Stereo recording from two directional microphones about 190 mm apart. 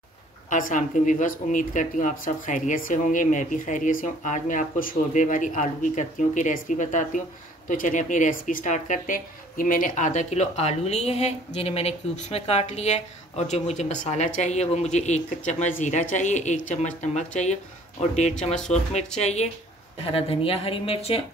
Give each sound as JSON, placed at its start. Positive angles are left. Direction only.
{"t": 0.5, "sound": "speech", "side_deg": 45}